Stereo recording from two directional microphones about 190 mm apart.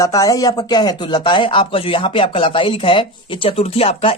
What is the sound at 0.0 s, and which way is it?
Speech, 20° left (ahead or behind).